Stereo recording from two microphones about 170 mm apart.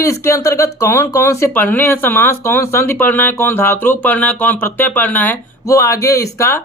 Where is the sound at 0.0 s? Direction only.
15° left (ahead or behind).